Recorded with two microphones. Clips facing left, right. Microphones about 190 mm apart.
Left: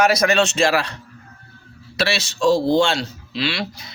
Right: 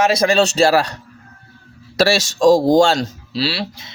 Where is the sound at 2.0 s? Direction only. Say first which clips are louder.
Right 6 dB; 45° right (ahead or behind).